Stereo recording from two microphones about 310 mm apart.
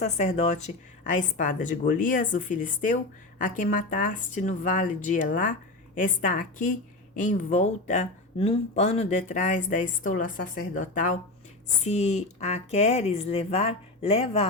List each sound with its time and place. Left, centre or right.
0.0 s speech: left